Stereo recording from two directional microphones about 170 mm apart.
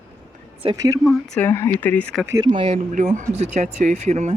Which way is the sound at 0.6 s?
25° right (ahead or behind).